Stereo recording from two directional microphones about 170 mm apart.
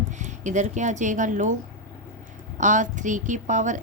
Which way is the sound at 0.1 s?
45° right (ahead or behind).